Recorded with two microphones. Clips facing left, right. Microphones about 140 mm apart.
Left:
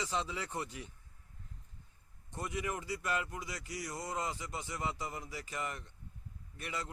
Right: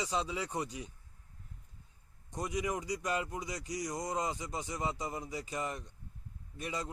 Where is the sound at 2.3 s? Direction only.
15° right (ahead or behind).